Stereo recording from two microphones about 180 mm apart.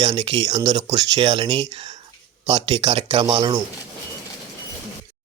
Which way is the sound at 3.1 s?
25° right (ahead or behind).